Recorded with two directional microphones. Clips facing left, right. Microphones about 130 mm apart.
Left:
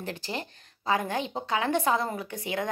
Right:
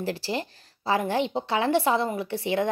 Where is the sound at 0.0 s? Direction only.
30° right (ahead or behind).